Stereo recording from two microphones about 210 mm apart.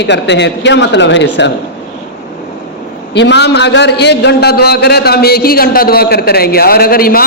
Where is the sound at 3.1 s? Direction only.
55° left (ahead or behind).